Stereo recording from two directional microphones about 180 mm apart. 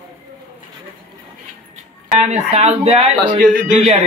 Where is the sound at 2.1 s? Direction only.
40° right (ahead or behind).